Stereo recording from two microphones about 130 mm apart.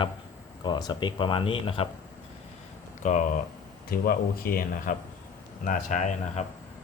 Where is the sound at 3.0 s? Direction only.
70° left (ahead or behind).